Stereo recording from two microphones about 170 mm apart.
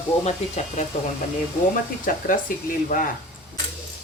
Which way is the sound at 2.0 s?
55° left (ahead or behind).